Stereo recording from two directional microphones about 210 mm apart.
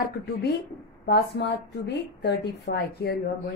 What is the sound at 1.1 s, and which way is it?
A woman's voice, 55° left (ahead or behind).